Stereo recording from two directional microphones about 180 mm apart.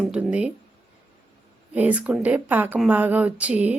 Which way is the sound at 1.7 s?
10° right (ahead or behind).